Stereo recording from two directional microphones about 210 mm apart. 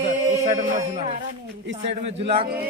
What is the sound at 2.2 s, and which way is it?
Speech, 25° right (ahead or behind).